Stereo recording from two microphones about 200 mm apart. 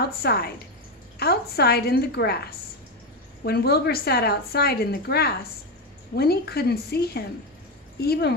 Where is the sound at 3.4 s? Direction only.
55° left (ahead or behind).